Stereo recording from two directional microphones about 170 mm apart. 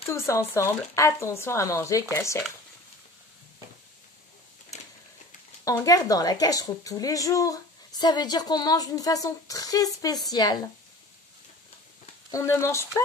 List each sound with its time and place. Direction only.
0.1 s speech: 15° left (ahead or behind)
5.7 s a woman's voice: 20° left (ahead or behind)
12.3 s speech: 15° left (ahead or behind)